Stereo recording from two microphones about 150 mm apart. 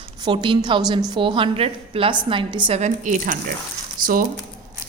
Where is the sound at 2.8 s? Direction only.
55° right (ahead or behind).